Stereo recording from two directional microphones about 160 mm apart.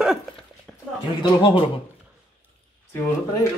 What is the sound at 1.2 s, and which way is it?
Speech, 30° left (ahead or behind).